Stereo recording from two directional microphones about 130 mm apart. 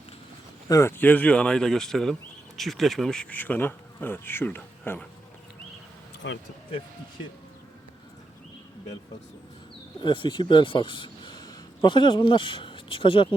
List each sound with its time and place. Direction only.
0.7 s speech: 20° left (ahead or behind)
10.0 s speech: 35° left (ahead or behind)